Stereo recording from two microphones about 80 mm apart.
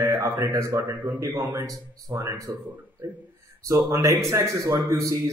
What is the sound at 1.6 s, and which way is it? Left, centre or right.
Speech, right.